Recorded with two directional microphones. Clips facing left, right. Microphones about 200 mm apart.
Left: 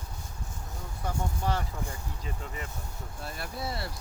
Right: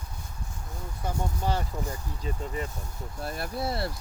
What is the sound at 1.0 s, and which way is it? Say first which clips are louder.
Speech: right 1 dB; 30° right (ahead or behind).